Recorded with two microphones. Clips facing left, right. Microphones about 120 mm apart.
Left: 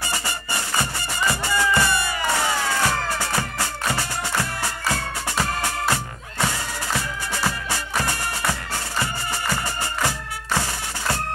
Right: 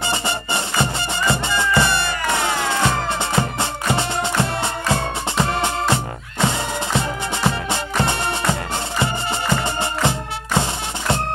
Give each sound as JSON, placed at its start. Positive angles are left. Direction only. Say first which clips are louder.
{"t": 0.1, "sound": "music", "louder": "right 5 dB", "side_deg": -25}
{"t": 10.0, "sound": "music", "louder": "right 4 dB", "side_deg": -20}